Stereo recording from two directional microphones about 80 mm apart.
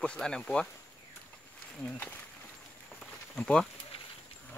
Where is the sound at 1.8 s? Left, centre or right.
Centre.